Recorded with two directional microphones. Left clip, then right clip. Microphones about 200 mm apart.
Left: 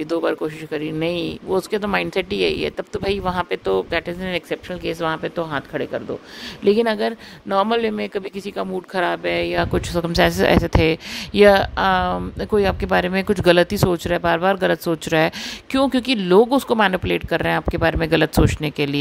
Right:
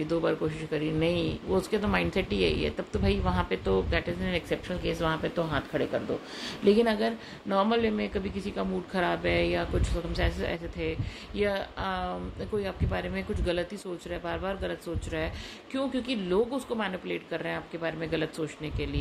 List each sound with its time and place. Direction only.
0.0 s speech: 60° left (ahead or behind)